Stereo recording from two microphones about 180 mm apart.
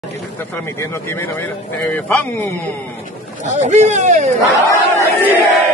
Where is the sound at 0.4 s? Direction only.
10° left (ahead or behind).